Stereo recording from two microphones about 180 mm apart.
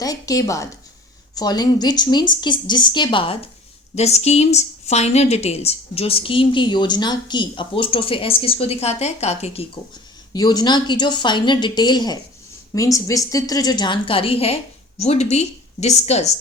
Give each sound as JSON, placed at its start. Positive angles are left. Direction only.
{"t": 0.0, "sound": "a woman's voice", "side_deg": 20}
{"t": 10.3, "sound": "a woman's voice", "side_deg": 20}